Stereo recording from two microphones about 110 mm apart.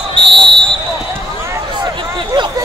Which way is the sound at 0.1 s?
50° right (ahead or behind).